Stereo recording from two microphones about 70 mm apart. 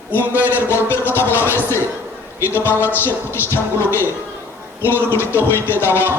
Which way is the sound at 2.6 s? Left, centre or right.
Left.